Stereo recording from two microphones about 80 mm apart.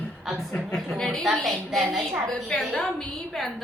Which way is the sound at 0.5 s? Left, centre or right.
Centre.